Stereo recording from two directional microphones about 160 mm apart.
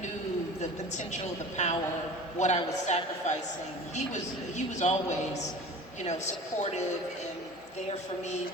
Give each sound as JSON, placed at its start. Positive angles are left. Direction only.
{"t": 0.6, "sound": "a woman's voice", "side_deg": 45}